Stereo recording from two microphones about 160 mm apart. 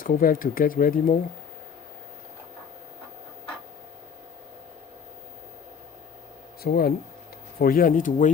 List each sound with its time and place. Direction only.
0.0 s speech: 60° left (ahead or behind)
6.6 s speech: 75° left (ahead or behind)
7.6 s speech: 60° left (ahead or behind)